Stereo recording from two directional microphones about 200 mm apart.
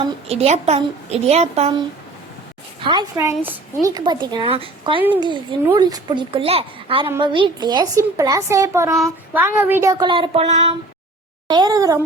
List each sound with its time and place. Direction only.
0.3 s a woman's voice: 30° right (ahead or behind)
2.8 s a woman's voice: 20° right (ahead or behind)
9.0 s child singing: 10° right (ahead or behind)
9.6 s a woman's voice: 10° right (ahead or behind); by 10.8 s 35° right (ahead or behind)
11.4 s a woman's voice: 20° right (ahead or behind)